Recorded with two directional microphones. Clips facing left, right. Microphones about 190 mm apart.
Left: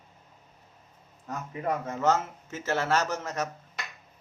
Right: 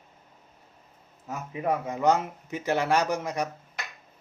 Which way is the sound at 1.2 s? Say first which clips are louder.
Right 2 dB; 10° right (ahead or behind).